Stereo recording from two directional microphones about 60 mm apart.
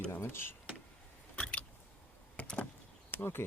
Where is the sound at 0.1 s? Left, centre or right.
Left.